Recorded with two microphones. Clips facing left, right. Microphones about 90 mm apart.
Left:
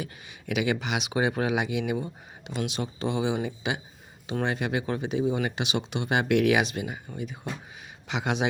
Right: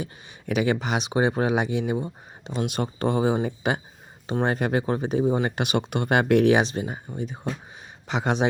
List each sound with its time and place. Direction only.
0.0 s speech: 40° right (ahead or behind)
2.6 s speech: 50° right (ahead or behind)